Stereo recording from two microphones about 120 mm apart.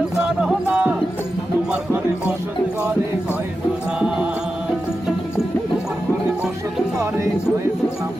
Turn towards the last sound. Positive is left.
turn(degrees=-25)  # may be behind; listen again after turning